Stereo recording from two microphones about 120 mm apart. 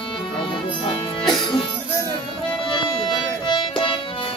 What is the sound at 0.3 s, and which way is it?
Music, 45° left (ahead or behind).